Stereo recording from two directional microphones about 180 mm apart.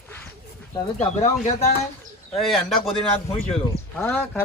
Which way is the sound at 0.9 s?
35° left (ahead or behind).